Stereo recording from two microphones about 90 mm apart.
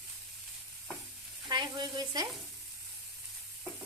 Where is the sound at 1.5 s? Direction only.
60° right (ahead or behind).